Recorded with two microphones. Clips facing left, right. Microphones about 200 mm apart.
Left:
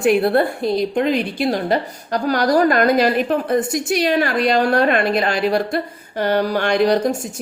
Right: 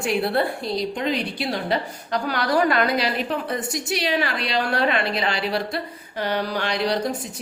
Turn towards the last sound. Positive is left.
turn(degrees=50)  # may be behind; listen again after turning